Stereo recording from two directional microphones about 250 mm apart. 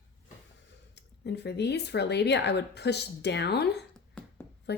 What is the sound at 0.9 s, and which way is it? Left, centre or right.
Speech, left.